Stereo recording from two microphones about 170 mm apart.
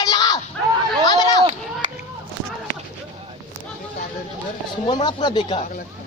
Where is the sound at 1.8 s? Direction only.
50° right (ahead or behind).